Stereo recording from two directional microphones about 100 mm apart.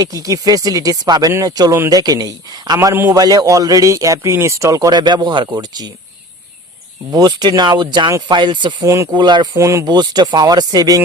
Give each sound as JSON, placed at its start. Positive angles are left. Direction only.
{"t": 0.0, "sound": "a man's voice", "side_deg": -35}
{"t": 3.1, "sound": "a man's voice", "side_deg": -40}
{"t": 7.1, "sound": "speech", "side_deg": -45}
{"t": 8.8, "sound": "a man's voice", "side_deg": -30}
{"t": 9.1, "sound": "speech", "side_deg": -50}
{"t": 9.6, "sound": "speech", "side_deg": -30}
{"t": 9.8, "sound": "a man's voice", "side_deg": -45}